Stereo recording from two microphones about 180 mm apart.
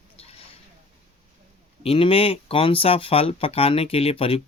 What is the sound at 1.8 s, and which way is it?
Speech, 30° left (ahead or behind).